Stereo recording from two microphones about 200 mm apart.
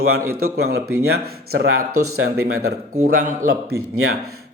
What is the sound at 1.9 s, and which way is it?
Speech, 90° right.